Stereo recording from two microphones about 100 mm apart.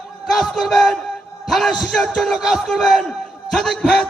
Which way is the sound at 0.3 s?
Centre (ahead or behind).